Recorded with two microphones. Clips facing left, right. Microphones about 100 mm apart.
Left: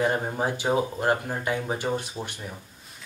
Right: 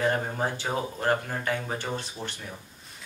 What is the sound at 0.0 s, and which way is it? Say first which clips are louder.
Speech: left 2 dB; 15° left (ahead or behind).